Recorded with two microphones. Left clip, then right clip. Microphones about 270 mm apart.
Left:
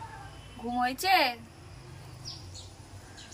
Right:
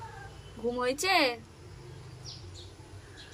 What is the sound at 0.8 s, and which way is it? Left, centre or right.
Speech, centre.